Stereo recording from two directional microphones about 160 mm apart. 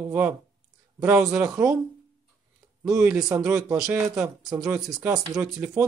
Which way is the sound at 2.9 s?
20° right (ahead or behind).